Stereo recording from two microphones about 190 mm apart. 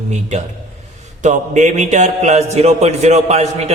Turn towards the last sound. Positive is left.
turn(degrees=-35)  # may be behind; listen again after turning